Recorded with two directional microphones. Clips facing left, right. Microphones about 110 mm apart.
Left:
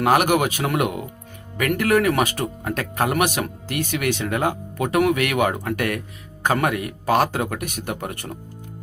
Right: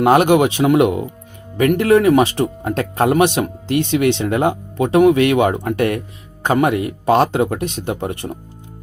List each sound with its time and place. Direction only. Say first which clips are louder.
0.0 s speech: right 6 dB; 25° right (ahead or behind)